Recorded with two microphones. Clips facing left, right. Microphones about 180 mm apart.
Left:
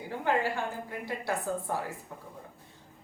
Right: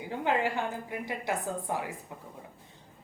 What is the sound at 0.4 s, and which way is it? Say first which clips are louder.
A woman's voice: right 1 dB; 15° right (ahead or behind).